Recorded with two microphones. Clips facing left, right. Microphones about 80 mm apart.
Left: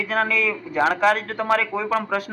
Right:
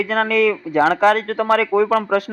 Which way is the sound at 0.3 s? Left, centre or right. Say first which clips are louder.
Right 8 dB; right.